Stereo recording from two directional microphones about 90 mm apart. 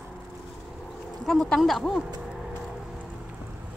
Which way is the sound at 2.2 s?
5° right (ahead or behind).